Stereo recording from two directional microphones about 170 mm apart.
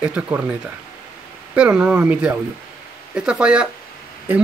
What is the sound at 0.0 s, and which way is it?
Speech, 5° right (ahead or behind).